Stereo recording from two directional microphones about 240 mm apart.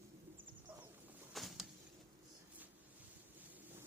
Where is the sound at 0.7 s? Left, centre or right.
Centre.